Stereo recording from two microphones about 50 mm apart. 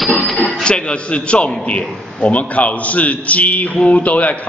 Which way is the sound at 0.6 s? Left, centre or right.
Centre.